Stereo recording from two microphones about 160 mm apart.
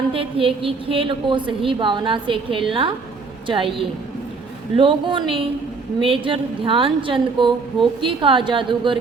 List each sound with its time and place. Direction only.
0.1 s a woman's voice: 35° right (ahead or behind)